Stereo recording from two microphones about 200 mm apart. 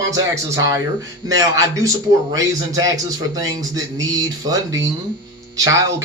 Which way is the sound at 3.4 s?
20° right (ahead or behind).